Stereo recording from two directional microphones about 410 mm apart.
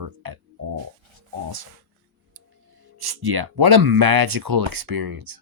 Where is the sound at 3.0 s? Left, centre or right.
Right.